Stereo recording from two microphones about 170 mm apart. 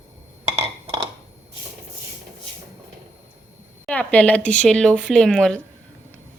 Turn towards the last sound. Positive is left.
turn(degrees=5)  # may be behind; listen again after turning